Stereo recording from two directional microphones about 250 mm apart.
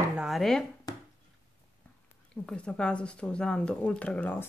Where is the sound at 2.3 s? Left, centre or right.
Centre.